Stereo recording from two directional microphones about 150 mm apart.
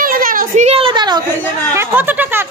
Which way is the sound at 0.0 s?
70° right (ahead or behind).